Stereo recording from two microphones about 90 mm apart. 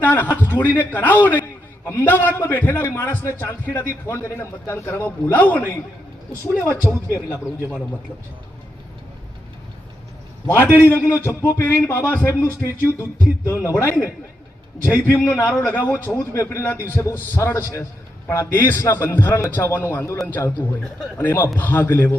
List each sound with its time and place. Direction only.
0.0 s a man's voice: 20° left (ahead or behind)
6.4 s a man's voice: 30° left (ahead or behind)
10.4 s a man's voice: 25° left (ahead or behind)
15.3 s a man's voice: 20° left (ahead or behind)